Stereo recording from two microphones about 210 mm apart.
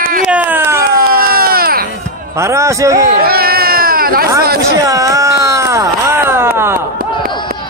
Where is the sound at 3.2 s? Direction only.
45° right (ahead or behind).